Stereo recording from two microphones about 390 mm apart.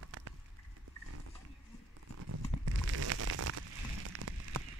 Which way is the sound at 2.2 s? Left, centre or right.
Right.